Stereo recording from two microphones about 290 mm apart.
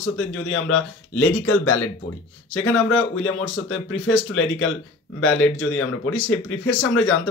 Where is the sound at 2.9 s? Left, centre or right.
Left.